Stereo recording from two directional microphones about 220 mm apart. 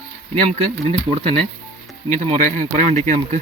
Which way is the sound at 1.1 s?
25° right (ahead or behind).